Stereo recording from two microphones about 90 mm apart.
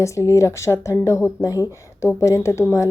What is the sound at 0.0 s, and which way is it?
Speech, 35° left (ahead or behind).